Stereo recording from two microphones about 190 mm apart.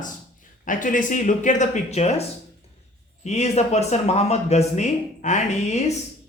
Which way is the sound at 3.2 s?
35° left (ahead or behind).